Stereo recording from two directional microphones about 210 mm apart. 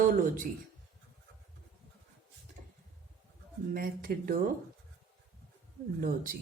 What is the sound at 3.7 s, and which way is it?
Speech, 40° right (ahead or behind).